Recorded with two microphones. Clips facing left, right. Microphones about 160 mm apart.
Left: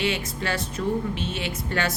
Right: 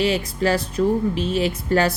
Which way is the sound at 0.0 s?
35° right (ahead or behind).